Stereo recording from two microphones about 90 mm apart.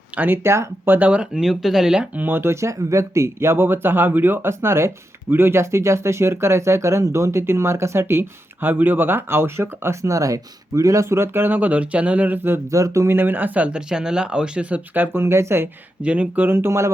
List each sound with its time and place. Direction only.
0.2 s speech: 25° right (ahead or behind)
0.9 s speech: 15° right (ahead or behind)
2.2 s speech: 25° right (ahead or behind)
12.7 s speech: 35° right (ahead or behind)
16.0 s speech: 15° right (ahead or behind); by 16.9 s 30° right (ahead or behind)